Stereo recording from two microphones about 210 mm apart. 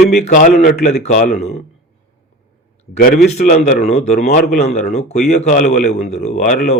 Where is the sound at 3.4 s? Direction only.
35° left (ahead or behind).